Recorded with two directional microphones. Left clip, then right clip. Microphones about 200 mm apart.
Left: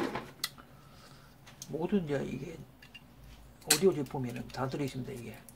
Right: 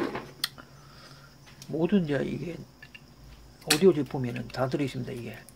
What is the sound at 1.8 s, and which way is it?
Speech, 40° right (ahead or behind).